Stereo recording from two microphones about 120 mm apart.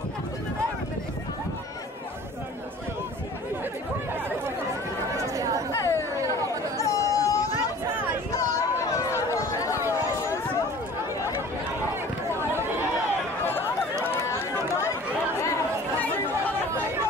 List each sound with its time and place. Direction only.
5.1 s chatter: 30° right (ahead or behind)
5.7 s chatter: 25° left (ahead or behind)
8.4 s a sound: 25° left (ahead or behind)
9.8 s chatter: 25° left (ahead or behind)
12.4 s chatter: 20° right (ahead or behind)
13.9 s run: 20° right (ahead or behind)
16.0 s chatter: 15° left (ahead or behind)